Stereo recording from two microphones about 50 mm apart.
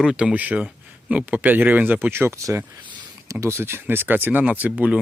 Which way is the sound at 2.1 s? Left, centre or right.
Right.